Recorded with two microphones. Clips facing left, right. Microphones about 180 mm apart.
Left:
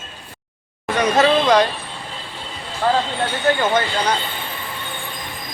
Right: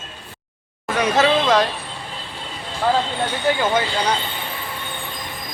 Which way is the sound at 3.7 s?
10° right (ahead or behind).